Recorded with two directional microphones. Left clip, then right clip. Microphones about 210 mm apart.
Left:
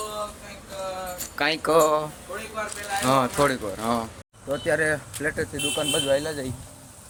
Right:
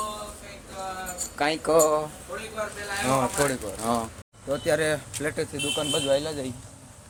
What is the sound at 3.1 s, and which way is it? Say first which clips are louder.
Speech: left 3 dB; 20° left (ahead or behind).